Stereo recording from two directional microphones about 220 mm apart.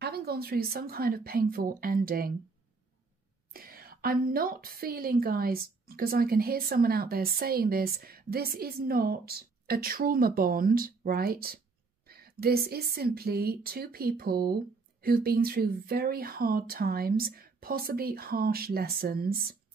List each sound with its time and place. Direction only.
0.0 s a woman's voice: 45° right (ahead or behind)
3.5 s a woman's voice: 40° right (ahead or behind)